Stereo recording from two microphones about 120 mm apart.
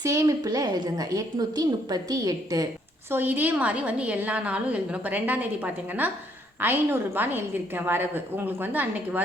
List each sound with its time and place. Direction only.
0.0 s a woman's voice: 25° right (ahead or behind)
3.1 s a woman's voice: 15° right (ahead or behind)